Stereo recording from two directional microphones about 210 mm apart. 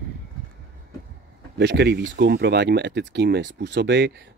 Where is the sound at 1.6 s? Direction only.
55° right (ahead or behind).